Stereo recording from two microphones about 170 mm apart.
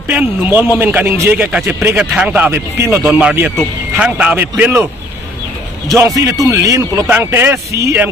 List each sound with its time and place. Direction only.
0.1 s a man's voice: 10° right (ahead or behind)
5.9 s a man's voice: 20° right (ahead or behind)